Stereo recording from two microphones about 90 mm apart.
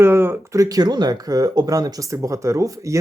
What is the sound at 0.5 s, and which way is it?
Speech, 45° right (ahead or behind).